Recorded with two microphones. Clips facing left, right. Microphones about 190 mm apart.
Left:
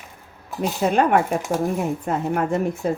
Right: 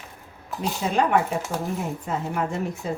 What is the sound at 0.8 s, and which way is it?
Speech, 55° left (ahead or behind).